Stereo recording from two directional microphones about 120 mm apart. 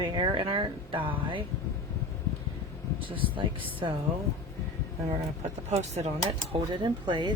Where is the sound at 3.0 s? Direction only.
45° right (ahead or behind).